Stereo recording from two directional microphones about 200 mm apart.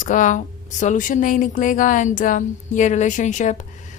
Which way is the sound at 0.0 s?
40° left (ahead or behind).